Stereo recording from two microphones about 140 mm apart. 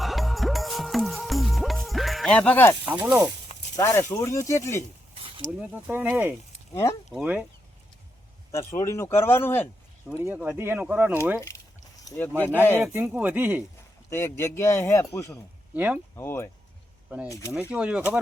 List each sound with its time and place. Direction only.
0.0 s music: centre (ahead or behind)
2.9 s speech: 10° right (ahead or behind)
3.8 s speech: 20° left (ahead or behind)
5.5 s speech: 10° right (ahead or behind)
8.5 s speech: 20° left (ahead or behind)
10.1 s speech: 10° right (ahead or behind)
11.3 s speech: 20° left (ahead or behind)
12.8 s speech: 15° right (ahead or behind)
14.1 s speech: 15° left (ahead or behind)
15.7 s speech: 10° right (ahead or behind)
16.1 s speech: 15° left (ahead or behind)
17.5 s speech: 10° right (ahead or behind)